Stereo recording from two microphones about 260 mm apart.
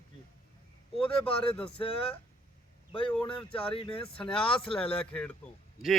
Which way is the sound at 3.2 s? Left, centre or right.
Left.